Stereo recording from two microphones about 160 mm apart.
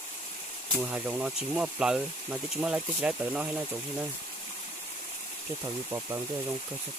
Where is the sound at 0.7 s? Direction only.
10° right (ahead or behind).